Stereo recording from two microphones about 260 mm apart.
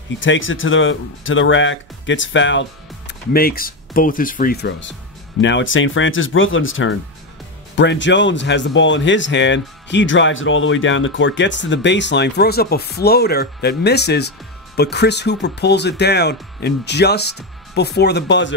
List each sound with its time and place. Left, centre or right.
0.2 s speech: left